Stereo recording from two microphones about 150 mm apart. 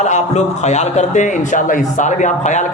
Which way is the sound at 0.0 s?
50° left (ahead or behind).